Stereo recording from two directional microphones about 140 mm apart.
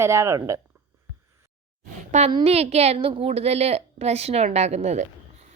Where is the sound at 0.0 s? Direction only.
20° right (ahead or behind).